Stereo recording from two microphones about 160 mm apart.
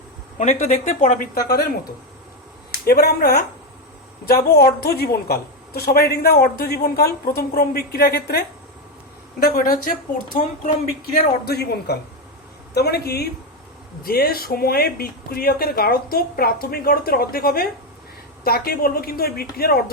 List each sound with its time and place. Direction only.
0.3 s speech: 50° left (ahead or behind); by 1.6 s 65° left (ahead or behind)
2.8 s a woman's voice: 75° left (ahead or behind)
9.4 s a woman's voice: 60° left (ahead or behind); by 13.2 s 85° left
14.0 s a woman's voice: 70° left (ahead or behind)